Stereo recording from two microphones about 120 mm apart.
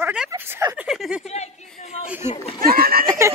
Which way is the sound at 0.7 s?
5° right (ahead or behind).